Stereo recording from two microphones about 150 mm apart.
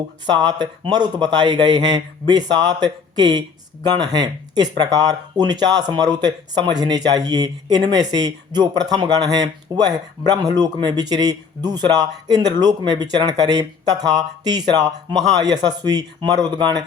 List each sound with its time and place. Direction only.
0.3 s speech: 30° right (ahead or behind)